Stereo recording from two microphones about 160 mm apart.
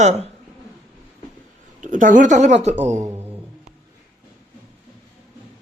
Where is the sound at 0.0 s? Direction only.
45° right (ahead or behind).